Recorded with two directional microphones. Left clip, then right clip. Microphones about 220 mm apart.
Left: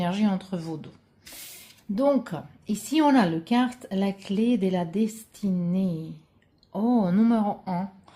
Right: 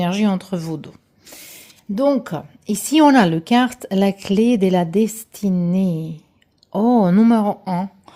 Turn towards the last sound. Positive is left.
turn(degrees=-45)  # may be behind; listen again after turning